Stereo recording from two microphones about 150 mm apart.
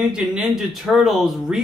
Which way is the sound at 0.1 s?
5° right (ahead or behind).